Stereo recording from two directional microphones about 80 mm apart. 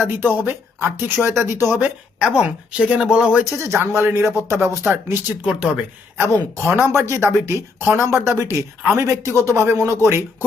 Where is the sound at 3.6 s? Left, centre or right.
Right.